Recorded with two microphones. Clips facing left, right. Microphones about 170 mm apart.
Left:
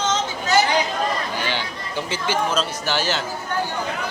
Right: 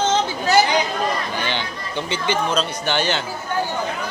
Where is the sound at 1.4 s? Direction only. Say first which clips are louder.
Right 1 dB; 10° left (ahead or behind).